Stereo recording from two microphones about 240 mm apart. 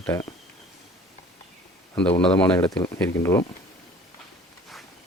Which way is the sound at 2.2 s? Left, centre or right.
Centre.